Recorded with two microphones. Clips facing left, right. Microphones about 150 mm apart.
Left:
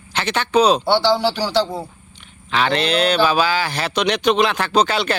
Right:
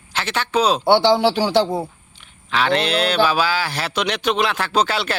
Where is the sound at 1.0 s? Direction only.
20° right (ahead or behind).